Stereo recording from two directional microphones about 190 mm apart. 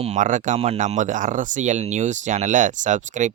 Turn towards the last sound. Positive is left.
turn(degrees=-40)  # may be behind; listen again after turning